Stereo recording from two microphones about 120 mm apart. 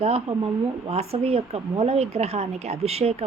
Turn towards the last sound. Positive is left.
turn(degrees=-60)  # may be behind; listen again after turning